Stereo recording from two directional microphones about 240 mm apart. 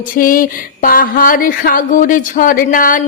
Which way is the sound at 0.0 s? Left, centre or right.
Left.